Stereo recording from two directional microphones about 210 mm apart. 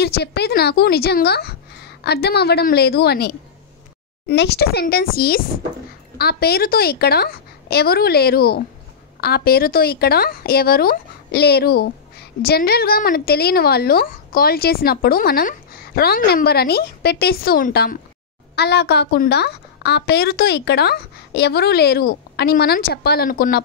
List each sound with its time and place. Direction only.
0.0 s a woman's voice: 50° left (ahead or behind)